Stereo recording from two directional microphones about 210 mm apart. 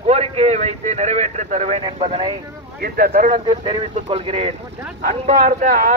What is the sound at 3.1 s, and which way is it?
Speech, 35° right (ahead or behind).